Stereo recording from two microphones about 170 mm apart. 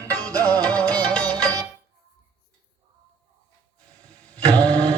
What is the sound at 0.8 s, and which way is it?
Music, 5° left (ahead or behind).